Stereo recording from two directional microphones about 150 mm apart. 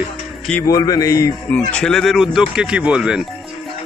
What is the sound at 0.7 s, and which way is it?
Speech, 25° left (ahead or behind).